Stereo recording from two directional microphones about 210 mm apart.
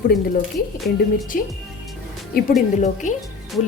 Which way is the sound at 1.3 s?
40° left (ahead or behind).